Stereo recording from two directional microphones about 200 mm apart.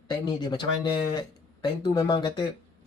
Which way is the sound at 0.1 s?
20° left (ahead or behind).